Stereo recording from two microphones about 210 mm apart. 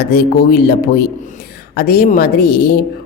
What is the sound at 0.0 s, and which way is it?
Speech, 45° left (ahead or behind).